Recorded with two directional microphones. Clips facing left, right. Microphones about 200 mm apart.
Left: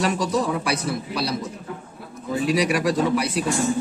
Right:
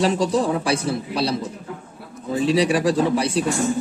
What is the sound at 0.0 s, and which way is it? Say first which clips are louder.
A man's voice: right 3 dB; 30° right (ahead or behind).